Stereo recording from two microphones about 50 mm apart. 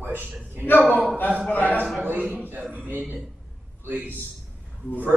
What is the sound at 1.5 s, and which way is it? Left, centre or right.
Speech, left.